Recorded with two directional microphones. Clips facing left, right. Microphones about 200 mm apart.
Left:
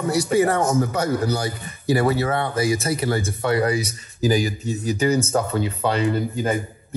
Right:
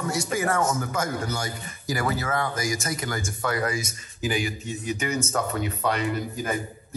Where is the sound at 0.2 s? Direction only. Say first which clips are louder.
Left 7 dB; 35° left (ahead or behind).